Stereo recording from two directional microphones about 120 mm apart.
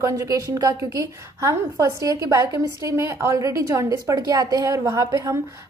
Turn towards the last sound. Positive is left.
turn(degrees=-25)  # may be behind; listen again after turning